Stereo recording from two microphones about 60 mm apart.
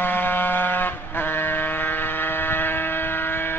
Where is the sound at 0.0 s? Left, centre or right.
Left.